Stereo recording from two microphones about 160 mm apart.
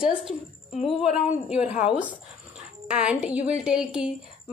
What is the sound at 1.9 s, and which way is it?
A woman's voice, 10° right (ahead or behind).